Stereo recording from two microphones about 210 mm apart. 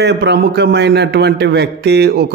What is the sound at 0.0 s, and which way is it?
A man's voice, 55° right (ahead or behind).